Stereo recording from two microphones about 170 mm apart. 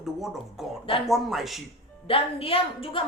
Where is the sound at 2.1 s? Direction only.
35° left (ahead or behind).